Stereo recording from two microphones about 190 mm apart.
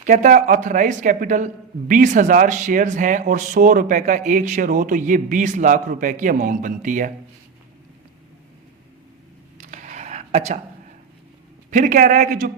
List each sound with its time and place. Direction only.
0.0 s speech: 40° right (ahead or behind)
9.6 s a sound: 40° right (ahead or behind)
11.7 s speech: 45° right (ahead or behind)